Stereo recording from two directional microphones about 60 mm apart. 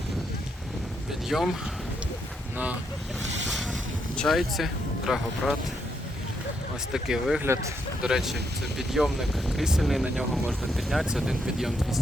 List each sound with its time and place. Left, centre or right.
1.3 s speech: centre
4.3 s speech: centre
6.9 s speech: centre
7.4 s speech: right
8.0 s speech: centre